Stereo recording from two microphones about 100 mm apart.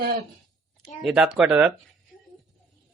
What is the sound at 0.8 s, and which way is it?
Speech, 5° right (ahead or behind).